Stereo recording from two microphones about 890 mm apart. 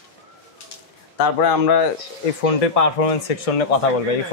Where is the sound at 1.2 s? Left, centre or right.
Left.